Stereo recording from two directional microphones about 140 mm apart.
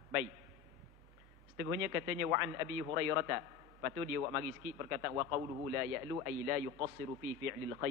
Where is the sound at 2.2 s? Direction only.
20° right (ahead or behind).